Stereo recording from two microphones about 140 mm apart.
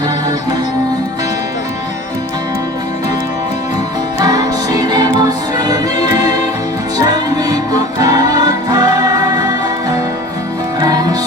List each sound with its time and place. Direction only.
4.2 s music: 25° right (ahead or behind)
10.8 s music: 30° right (ahead or behind)